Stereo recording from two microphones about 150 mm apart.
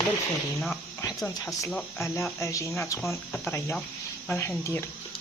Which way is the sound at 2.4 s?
20° left (ahead or behind).